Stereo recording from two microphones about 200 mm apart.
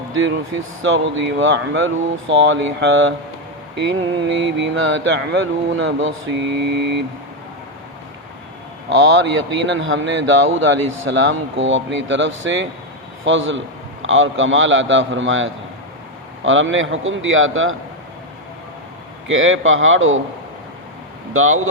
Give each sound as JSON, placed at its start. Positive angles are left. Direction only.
{"t": 0.1, "sound": "speech", "side_deg": -80}
{"t": 4.5, "sound": "speech", "side_deg": -70}
{"t": 8.9, "sound": "speech", "side_deg": -75}
{"t": 19.3, "sound": "a man's voice", "side_deg": -80}
{"t": 21.3, "sound": "speech", "side_deg": -90}